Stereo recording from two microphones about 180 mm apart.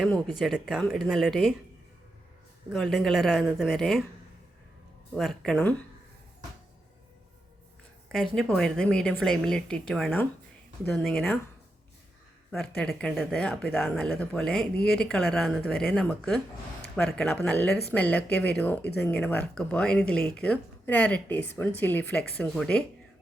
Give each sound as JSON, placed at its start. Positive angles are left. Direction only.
{"t": 0.0, "sound": "speech", "side_deg": 0}
{"t": 2.7, "sound": "speech", "side_deg": 0}
{"t": 5.1, "sound": "speech", "side_deg": 0}
{"t": 8.1, "sound": "speech", "side_deg": 0}
{"t": 12.5, "sound": "speech", "side_deg": 5}